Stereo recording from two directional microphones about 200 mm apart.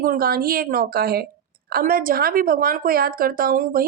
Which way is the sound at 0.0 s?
45° right (ahead or behind).